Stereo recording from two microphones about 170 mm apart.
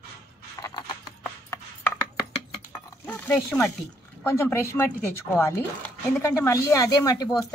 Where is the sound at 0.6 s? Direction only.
25° left (ahead or behind).